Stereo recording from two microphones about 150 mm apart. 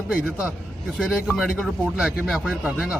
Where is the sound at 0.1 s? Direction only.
5° right (ahead or behind).